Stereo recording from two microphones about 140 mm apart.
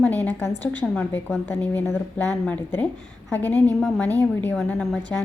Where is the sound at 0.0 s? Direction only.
10° left (ahead or behind).